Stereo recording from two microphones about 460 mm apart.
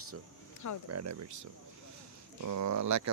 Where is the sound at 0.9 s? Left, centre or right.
Right.